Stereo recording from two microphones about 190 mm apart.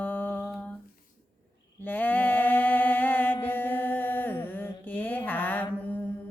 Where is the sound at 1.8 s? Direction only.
10° left (ahead or behind).